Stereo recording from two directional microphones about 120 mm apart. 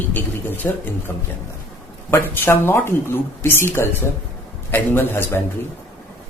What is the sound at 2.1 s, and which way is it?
A man's voice, 20° left (ahead or behind).